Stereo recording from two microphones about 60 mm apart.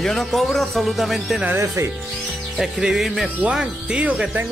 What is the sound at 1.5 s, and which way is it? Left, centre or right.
Speech, right.